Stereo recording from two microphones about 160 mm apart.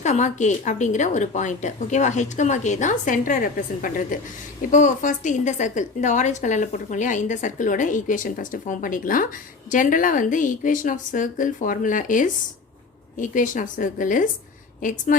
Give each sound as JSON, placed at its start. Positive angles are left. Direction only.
{"t": 0.0, "sound": "a woman's voice", "side_deg": 50}